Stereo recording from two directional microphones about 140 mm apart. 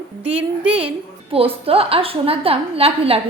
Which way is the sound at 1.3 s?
40° right (ahead or behind).